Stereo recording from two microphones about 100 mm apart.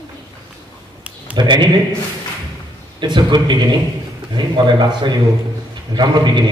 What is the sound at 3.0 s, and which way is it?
A man's voice, 50° right (ahead or behind).